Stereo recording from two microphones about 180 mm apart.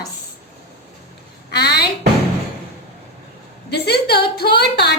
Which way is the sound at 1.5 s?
65° left (ahead or behind).